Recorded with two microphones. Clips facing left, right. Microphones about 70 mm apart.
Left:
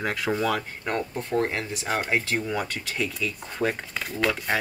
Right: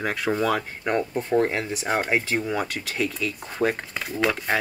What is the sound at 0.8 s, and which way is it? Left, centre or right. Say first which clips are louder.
Speech: right 4 dB; centre.